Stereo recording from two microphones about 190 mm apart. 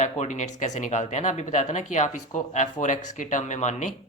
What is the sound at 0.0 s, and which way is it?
Speech, 40° left (ahead or behind).